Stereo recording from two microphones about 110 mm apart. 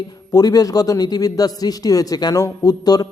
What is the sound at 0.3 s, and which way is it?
A man's voice, 35° left (ahead or behind).